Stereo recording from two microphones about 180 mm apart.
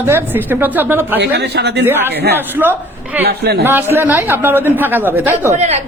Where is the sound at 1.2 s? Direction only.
70° right (ahead or behind).